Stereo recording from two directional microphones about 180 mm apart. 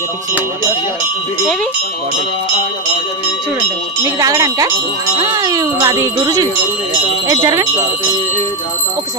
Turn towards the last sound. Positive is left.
turn(degrees=-20)  # may be behind; listen again after turning